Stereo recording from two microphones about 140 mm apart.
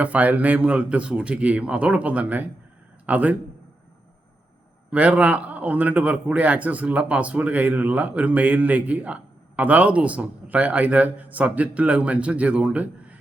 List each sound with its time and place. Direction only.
0.0 s a man's voice: 10° right (ahead or behind)
4.9 s a man's voice: 10° right (ahead or behind)